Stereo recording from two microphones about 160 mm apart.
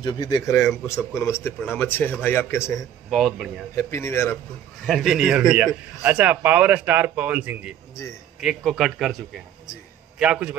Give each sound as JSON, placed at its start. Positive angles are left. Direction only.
{"t": 0.0, "sound": "a man's voice", "side_deg": 25}
{"t": 2.6, "sound": "speech", "side_deg": 0}
{"t": 3.7, "sound": "a man's voice", "side_deg": 15}
{"t": 4.8, "sound": "a man's voice", "side_deg": 0}